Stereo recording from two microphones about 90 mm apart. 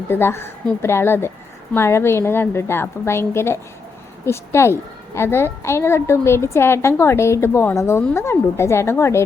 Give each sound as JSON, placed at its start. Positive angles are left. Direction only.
{"t": 0.1, "sound": "a child's voice", "side_deg": 25}